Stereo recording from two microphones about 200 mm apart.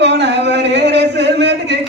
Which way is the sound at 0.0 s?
60° right (ahead or behind).